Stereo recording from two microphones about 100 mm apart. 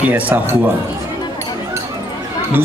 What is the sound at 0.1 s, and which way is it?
Speech, 15° right (ahead or behind).